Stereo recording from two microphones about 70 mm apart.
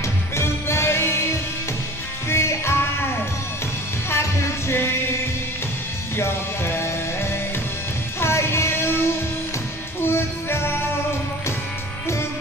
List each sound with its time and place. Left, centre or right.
0.4 s music: left
4.1 s music: left
6.1 s music: left